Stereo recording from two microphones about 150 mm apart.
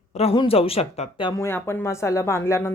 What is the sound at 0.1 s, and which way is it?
A woman's voice, 45° left (ahead or behind).